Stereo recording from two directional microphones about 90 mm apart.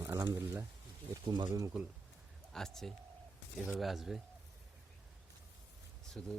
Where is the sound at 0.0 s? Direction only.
30° right (ahead or behind).